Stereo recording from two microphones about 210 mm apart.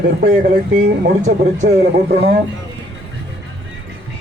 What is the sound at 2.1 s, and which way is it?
Speech, 50° right (ahead or behind).